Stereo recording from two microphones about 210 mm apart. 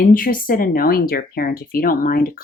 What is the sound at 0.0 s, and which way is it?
Speech, 40° left (ahead or behind).